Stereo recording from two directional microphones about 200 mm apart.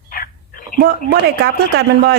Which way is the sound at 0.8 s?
50° right (ahead or behind).